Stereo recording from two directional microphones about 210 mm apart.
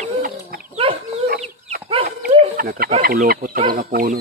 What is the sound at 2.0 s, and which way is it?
Wild animals, 45° right (ahead or behind).